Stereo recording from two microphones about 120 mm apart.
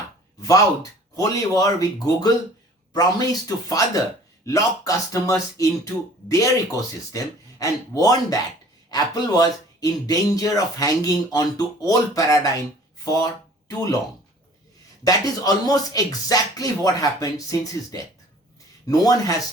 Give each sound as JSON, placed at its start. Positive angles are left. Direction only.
{"t": 0.4, "sound": "speech", "side_deg": 30}
{"t": 13.7, "sound": "speech", "side_deg": 30}
{"t": 15.0, "sound": "speech", "side_deg": 30}